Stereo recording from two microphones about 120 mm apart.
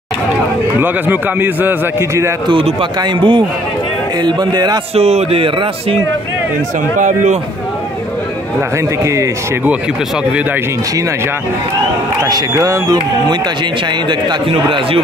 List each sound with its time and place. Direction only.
0.7 s a man's voice: 15° right (ahead or behind)
3.0 s speech: 40° right (ahead or behind)
4.9 s a man's voice: 60° right (ahead or behind)
7.0 s speech: 90° right
9.0 s a man's voice: 25° right (ahead or behind)
12.2 s a man's voice: 30° right (ahead or behind)
14.0 s a man's voice: 50° right (ahead or behind)